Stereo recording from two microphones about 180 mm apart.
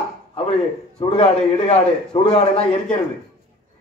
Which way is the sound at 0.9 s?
35° left (ahead or behind).